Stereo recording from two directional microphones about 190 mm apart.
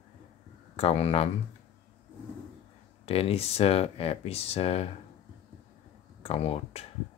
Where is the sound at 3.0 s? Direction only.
30° left (ahead or behind).